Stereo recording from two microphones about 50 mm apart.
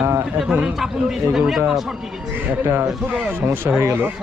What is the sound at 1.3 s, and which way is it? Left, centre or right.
Speech, centre.